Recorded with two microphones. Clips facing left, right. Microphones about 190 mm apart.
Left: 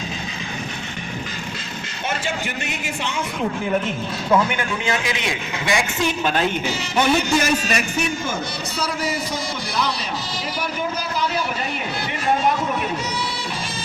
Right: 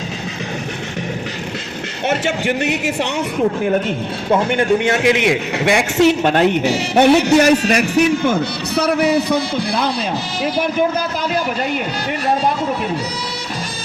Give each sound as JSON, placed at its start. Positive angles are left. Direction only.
{"t": 2.0, "sound": "a man's voice", "side_deg": -70}
{"t": 4.4, "sound": "a man's voice", "side_deg": -50}